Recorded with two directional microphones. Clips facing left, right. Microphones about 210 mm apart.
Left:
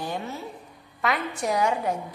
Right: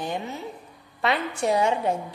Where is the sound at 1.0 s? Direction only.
30° right (ahead or behind).